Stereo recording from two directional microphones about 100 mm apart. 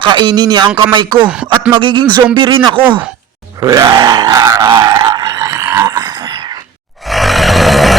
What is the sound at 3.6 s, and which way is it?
Grunt, 35° right (ahead or behind).